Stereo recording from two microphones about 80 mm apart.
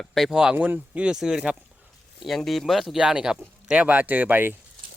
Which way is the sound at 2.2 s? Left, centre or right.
Centre.